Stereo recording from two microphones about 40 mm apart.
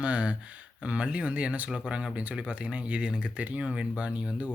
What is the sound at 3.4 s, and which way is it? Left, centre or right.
Speech, right.